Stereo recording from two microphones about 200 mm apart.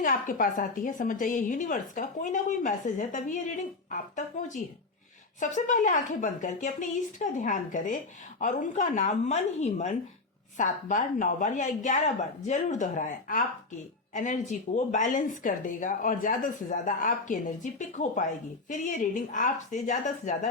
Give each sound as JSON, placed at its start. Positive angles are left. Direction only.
{"t": 0.0, "sound": "a woman's voice", "side_deg": 40}
{"t": 19.3, "sound": "a woman's voice", "side_deg": 40}